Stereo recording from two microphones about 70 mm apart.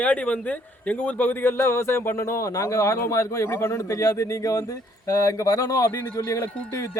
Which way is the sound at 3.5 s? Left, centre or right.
Left.